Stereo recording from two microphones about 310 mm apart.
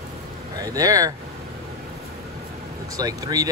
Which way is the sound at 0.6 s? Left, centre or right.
Centre.